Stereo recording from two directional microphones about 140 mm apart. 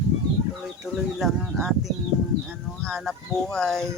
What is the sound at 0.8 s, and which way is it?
Speech, 5° right (ahead or behind).